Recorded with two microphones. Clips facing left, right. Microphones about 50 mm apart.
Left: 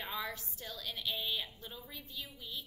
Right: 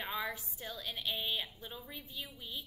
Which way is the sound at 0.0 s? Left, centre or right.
Centre.